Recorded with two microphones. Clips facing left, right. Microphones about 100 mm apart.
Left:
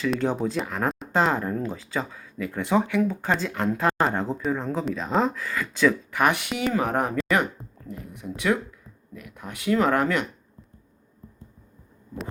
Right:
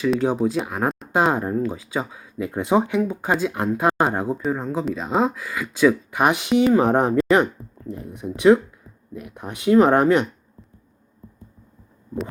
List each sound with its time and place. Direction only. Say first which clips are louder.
0.0 s speech: right 5 dB; 5° right (ahead or behind)
3.2 s speech: right 3 dB; 10° right (ahead or behind)
6.1 s speech: right 5 dB; 20° right (ahead or behind)